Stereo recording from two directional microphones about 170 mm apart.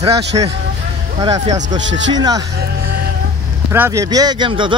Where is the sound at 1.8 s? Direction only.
90° right.